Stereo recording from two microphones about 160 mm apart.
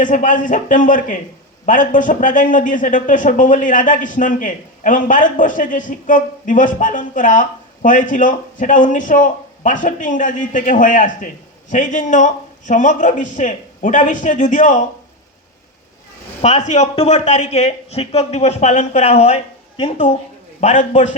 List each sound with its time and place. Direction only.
0.0 s a man's voice: 55° left (ahead or behind)
16.4 s speech: 45° left (ahead or behind)
20.6 s speech: 45° left (ahead or behind)